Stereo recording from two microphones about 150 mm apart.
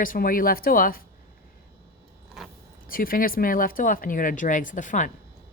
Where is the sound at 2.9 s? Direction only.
70° left (ahead or behind).